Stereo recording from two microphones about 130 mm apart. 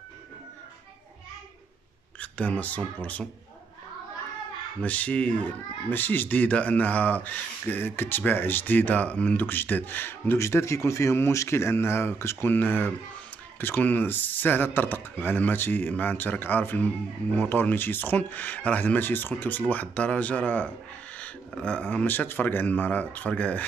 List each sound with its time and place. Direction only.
2.1 s speech: 10° left (ahead or behind)
4.8 s speech: 10° left (ahead or behind)